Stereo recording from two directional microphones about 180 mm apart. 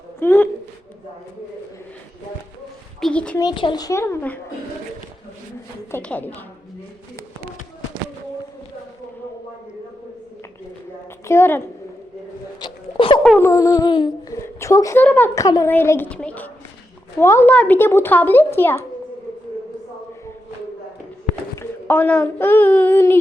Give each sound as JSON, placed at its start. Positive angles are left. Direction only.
{"t": 0.2, "sound": "a woman's voice", "side_deg": 15}
{"t": 3.0, "sound": "a woman's voice", "side_deg": 5}
{"t": 3.3, "sound": "a woman's voice", "side_deg": 25}
{"t": 5.9, "sound": "a child's voice", "side_deg": 10}
{"t": 11.3, "sound": "a child's voice", "side_deg": 15}
{"t": 12.5, "sound": "hiccup", "side_deg": 25}
{"t": 13.4, "sound": "a woman's voice", "side_deg": 15}
{"t": 21.5, "sound": "speech", "side_deg": 15}